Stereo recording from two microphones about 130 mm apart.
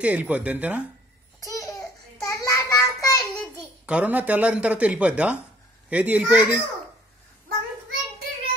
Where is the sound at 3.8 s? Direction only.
10° right (ahead or behind).